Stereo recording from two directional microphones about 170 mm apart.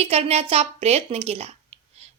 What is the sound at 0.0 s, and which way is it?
A woman's voice, 35° right (ahead or behind).